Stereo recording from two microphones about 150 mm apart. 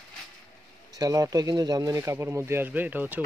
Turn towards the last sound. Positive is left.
turn(degrees=-10)  # may be behind; listen again after turning